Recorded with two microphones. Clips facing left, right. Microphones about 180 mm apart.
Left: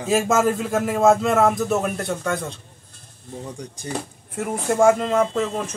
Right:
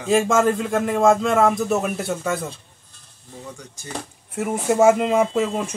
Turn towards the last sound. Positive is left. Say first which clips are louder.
# right 1 dB
turn(degrees=-10)  # may be behind; listen again after turning